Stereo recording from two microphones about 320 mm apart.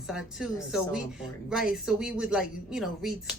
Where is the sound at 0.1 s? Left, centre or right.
Centre.